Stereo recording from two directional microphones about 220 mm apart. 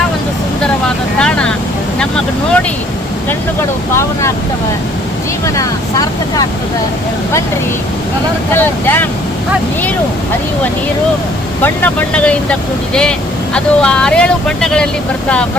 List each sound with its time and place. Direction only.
1.2 s vehicle: 5° left (ahead or behind)
3.2 s speech: 10° left (ahead or behind)
5.5 s speech: 15° left (ahead or behind)
8.5 s speech: 10° left (ahead or behind)
11.6 s speech: 10° left (ahead or behind)